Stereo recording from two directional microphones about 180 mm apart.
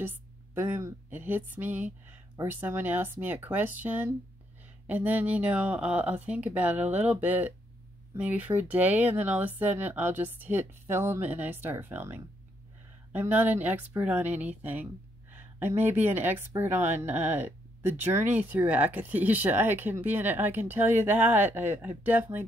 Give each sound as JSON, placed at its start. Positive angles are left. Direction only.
{"t": 0.0, "sound": "a woman's voice", "side_deg": -10}